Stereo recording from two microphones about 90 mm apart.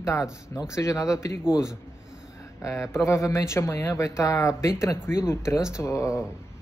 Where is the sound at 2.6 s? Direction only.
35° left (ahead or behind).